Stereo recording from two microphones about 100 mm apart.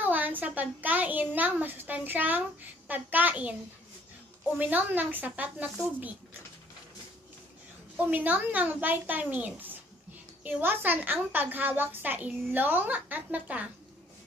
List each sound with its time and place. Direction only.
0.0 s a child's voice: 15° right (ahead or behind)
4.6 s a child's voice: 15° right (ahead or behind)
8.0 s a child's voice: 15° right (ahead or behind)